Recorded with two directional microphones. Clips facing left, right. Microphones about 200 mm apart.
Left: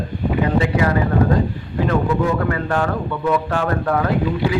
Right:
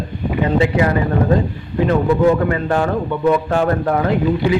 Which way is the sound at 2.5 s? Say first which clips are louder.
Right 3 dB; 25° right (ahead or behind).